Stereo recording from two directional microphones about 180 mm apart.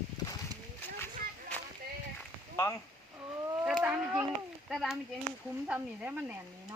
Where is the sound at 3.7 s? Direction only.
5° right (ahead or behind).